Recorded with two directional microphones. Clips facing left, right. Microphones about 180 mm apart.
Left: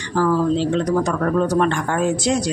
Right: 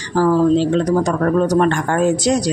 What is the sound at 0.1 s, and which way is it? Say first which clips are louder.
Speech: right 4 dB; 40° right (ahead or behind).